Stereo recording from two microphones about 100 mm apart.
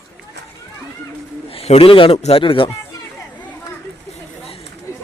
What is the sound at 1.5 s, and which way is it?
Speech, 80° left.